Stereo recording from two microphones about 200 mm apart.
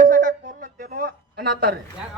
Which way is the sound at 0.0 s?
40° right (ahead or behind).